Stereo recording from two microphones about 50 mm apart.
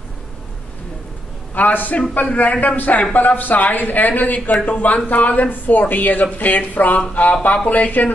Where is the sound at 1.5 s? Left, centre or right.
Left.